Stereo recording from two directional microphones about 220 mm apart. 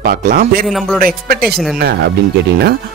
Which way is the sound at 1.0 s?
40° right (ahead or behind).